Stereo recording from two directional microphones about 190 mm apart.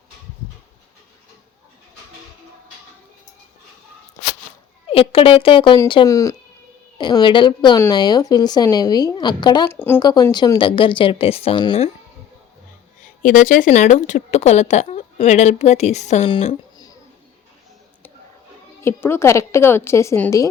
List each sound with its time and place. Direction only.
4.9 s speech: 30° left (ahead or behind)
9.6 s a woman's voice: 10° left (ahead or behind); by 11.9 s 30° left (ahead or behind)
13.2 s speech: 45° left (ahead or behind); by 16.9 s 25° left (ahead or behind)
18.8 s a woman's voice: 10° left (ahead or behind)